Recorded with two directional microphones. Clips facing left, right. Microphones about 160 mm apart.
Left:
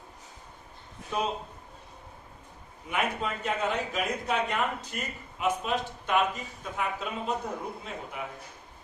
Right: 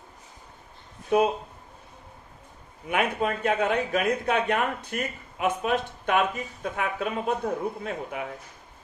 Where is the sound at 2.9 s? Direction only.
60° right (ahead or behind).